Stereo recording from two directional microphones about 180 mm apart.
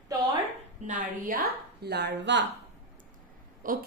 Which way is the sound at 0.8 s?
45° right (ahead or behind).